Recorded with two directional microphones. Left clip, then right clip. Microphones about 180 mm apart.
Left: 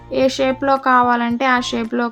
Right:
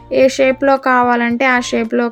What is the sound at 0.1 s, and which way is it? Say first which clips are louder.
Speech: right 5 dB; 20° right (ahead or behind).